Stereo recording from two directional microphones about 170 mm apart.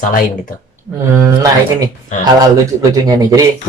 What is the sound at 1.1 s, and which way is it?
Speech, 20° right (ahead or behind).